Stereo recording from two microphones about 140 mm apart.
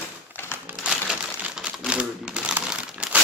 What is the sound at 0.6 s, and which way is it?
Crumpling, 5° right (ahead or behind).